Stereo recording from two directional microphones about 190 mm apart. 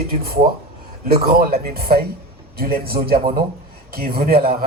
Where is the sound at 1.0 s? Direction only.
50° right (ahead or behind).